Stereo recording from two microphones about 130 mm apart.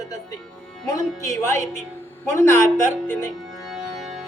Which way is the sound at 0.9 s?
25° left (ahead or behind).